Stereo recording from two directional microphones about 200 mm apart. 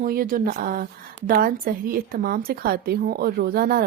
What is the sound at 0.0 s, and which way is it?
Speech, 45° right (ahead or behind).